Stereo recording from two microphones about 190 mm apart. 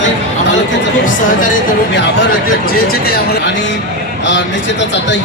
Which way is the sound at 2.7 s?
60° left (ahead or behind).